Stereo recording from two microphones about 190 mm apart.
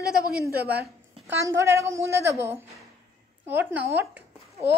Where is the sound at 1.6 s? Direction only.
15° right (ahead or behind).